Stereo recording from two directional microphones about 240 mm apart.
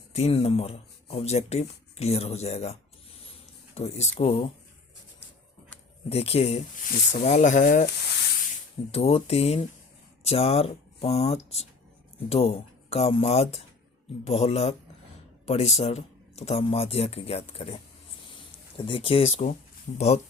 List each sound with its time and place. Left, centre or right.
0.1 s speech: left
3.8 s speech: left
6.1 s speech: left
18.9 s speech: left